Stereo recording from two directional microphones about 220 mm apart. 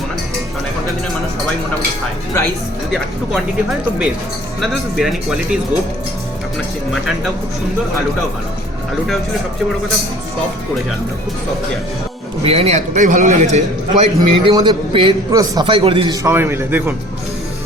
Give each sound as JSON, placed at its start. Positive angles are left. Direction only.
{"t": 2.9, "sound": "speech", "side_deg": 0}
{"t": 12.4, "sound": "a man's voice", "side_deg": -25}
{"t": 14.5, "sound": "a man's voice", "side_deg": -20}